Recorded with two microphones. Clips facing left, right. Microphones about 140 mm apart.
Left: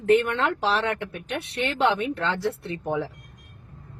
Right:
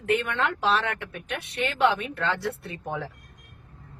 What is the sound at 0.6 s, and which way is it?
Speech, 30° left (ahead or behind).